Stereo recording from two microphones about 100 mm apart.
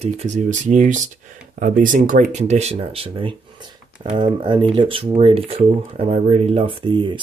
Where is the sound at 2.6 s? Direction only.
80° right.